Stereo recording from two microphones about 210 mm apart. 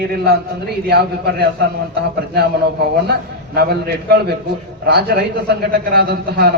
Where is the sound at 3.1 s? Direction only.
50° right (ahead or behind).